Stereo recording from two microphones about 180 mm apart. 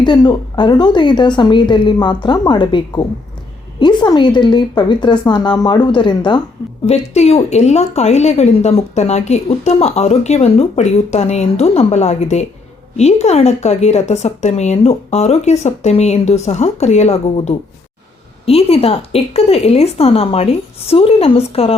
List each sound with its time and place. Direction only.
0.0 s a woman's voice: 25° left (ahead or behind)
6.8 s speech: 35° left (ahead or behind)